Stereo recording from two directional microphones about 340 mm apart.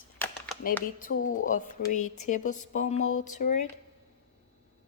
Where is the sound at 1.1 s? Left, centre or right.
Left.